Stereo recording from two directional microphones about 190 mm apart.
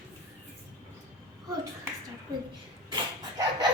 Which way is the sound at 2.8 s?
25° right (ahead or behind).